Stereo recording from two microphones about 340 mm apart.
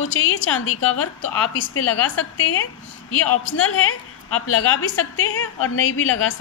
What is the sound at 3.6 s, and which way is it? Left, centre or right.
A woman's voice, left.